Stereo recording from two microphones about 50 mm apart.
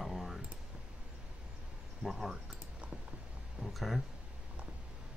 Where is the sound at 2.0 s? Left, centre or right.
Centre.